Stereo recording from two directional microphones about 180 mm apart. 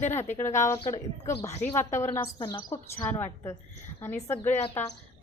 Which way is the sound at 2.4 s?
25° left (ahead or behind).